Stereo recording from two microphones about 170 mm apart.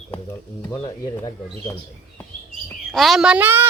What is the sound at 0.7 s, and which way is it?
Speech, 25° left (ahead or behind).